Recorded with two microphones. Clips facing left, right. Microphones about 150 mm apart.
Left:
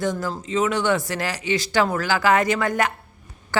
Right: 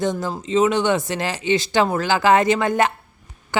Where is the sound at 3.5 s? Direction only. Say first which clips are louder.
Right 1 dB; 15° right (ahead or behind).